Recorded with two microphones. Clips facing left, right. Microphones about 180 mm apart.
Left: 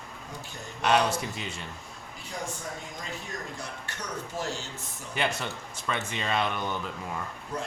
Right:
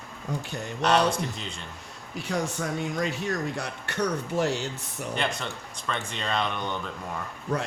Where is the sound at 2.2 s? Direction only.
75° right (ahead or behind).